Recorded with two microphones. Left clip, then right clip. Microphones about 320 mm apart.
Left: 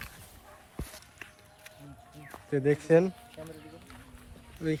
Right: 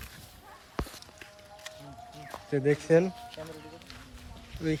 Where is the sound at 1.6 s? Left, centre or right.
Centre.